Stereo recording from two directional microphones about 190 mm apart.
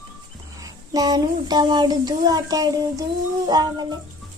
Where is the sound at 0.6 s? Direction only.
20° right (ahead or behind).